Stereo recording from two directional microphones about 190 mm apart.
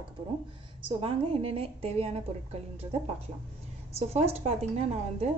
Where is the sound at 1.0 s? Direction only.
30° right (ahead or behind).